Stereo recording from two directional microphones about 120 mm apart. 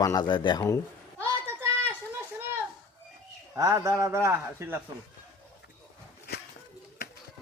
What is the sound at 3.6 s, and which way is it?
A man's voice, 25° right (ahead or behind).